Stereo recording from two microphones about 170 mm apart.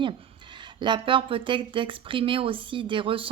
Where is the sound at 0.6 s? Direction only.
30° right (ahead or behind).